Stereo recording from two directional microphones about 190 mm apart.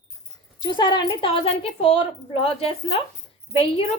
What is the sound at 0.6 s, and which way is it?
A woman's voice, 25° left (ahead or behind).